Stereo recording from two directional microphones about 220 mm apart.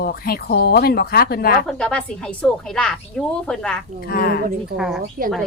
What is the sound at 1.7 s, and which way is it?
Speech, 5° left (ahead or behind).